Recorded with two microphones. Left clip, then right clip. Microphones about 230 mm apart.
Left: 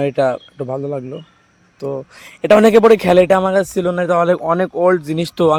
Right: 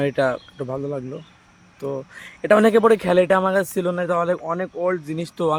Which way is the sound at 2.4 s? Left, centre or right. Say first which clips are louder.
Left 6 dB; left.